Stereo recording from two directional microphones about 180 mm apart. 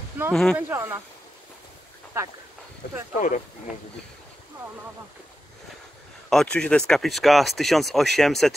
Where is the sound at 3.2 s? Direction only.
45° left (ahead or behind).